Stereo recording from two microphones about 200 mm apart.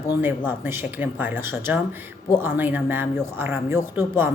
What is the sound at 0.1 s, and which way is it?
A woman's voice, 10° right (ahead or behind).